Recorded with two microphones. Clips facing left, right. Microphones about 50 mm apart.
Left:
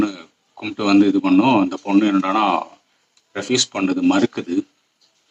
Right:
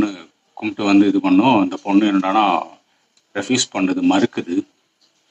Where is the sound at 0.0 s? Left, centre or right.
Centre.